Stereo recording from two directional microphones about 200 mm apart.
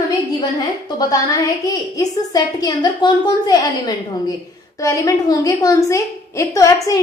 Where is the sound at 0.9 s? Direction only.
20° left (ahead or behind).